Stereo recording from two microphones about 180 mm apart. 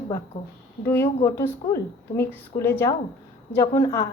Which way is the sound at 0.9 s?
15° left (ahead or behind).